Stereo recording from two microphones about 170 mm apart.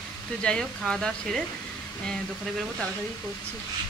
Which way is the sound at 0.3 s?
5° left (ahead or behind).